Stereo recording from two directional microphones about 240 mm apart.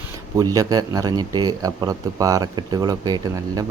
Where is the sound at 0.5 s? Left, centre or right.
Centre.